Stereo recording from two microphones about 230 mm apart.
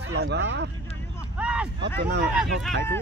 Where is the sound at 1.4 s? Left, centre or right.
Centre.